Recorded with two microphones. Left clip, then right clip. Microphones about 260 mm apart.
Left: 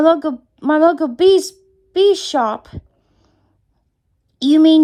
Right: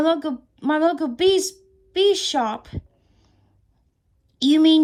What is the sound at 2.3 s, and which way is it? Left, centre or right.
Speech, left.